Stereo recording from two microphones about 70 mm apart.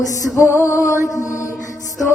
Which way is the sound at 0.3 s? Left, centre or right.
Left.